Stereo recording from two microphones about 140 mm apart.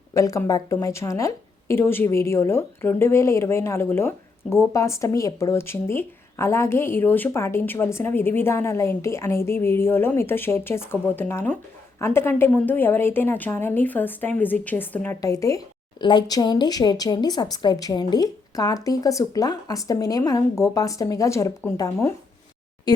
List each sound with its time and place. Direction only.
0.1 s a woman's voice: 25° left (ahead or behind)